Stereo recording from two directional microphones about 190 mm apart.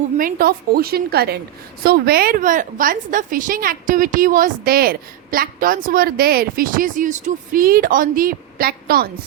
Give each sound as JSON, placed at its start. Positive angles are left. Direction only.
{"t": 0.2, "sound": "a woman's voice", "side_deg": -50}